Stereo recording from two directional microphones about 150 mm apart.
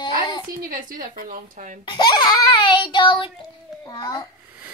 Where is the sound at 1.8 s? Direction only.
30° left (ahead or behind).